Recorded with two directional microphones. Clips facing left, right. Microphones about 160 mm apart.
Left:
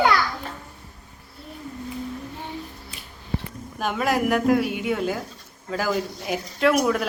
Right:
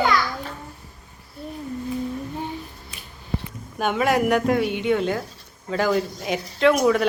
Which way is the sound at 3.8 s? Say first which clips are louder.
Right 3 dB; centre (ahead or behind).